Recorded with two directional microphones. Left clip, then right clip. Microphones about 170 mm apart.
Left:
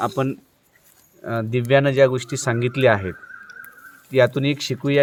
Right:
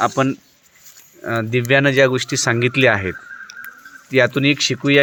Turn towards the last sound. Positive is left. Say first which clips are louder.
# right 6 dB
turn(degrees=-15)  # may be behind; listen again after turning